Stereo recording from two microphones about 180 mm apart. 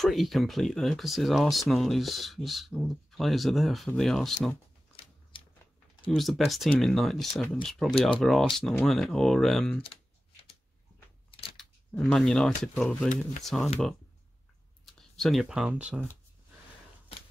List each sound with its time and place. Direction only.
0.0 s speech: centre (ahead or behind)
5.3 s a sound: 30° left (ahead or behind)
6.1 s speech: centre (ahead or behind)
11.5 s speech: 5° left (ahead or behind)
15.0 s speech: centre (ahead or behind)